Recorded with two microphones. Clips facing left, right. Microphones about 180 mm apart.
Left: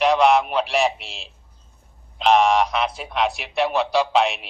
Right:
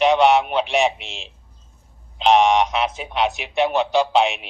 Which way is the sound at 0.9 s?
35° left (ahead or behind).